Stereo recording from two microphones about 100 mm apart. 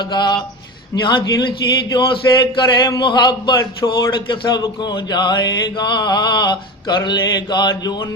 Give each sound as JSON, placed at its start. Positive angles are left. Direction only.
{"t": 0.0, "sound": "mantra", "side_deg": 45}
{"t": 3.8, "sound": "a man's voice", "side_deg": 30}
{"t": 4.3, "sound": "mantra", "side_deg": 45}